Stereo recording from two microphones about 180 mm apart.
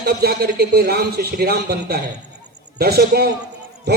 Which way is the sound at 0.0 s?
60° right (ahead or behind).